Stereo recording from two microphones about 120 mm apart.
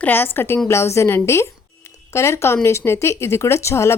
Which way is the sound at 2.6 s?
20° left (ahead or behind).